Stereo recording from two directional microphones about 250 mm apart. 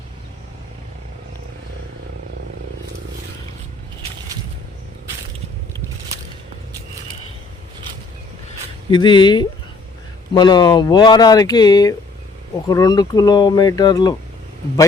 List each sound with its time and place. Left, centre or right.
8.9 s speech: centre